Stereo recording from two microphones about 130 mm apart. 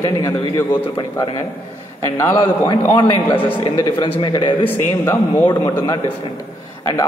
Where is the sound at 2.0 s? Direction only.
20° left (ahead or behind).